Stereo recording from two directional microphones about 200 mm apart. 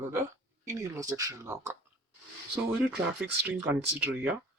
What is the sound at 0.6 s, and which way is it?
Speech, 15° right (ahead or behind).